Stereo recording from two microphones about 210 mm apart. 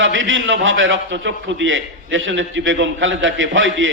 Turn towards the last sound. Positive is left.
turn(degrees=-65)  # may be behind; listen again after turning